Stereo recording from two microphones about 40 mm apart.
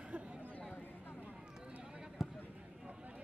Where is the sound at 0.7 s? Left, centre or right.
Left.